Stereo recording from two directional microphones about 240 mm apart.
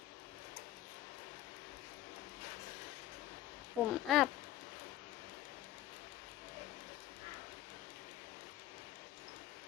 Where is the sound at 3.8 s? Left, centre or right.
Centre.